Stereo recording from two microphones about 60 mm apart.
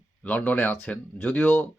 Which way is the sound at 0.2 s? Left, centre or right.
Left.